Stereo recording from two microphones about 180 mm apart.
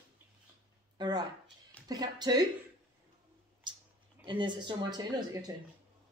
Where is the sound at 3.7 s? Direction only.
25° right (ahead or behind).